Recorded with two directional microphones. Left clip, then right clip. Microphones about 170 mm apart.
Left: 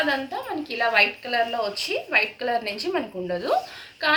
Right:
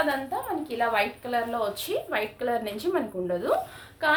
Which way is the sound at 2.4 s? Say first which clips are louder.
Left 3 dB; 15° right (ahead or behind).